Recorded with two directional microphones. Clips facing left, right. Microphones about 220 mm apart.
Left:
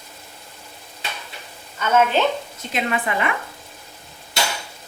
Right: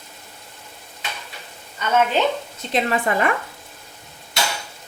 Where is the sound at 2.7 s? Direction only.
35° right (ahead or behind).